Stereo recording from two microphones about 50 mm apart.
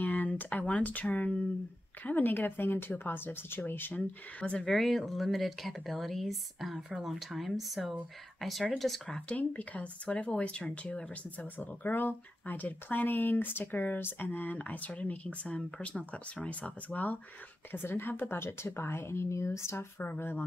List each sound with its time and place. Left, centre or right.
0.0 s speech: left
4.4 s speech: left
4.7 s speech: centre
9.3 s speech: left
17.6 s speech: left
18.4 s speech: left
20.0 s speech: left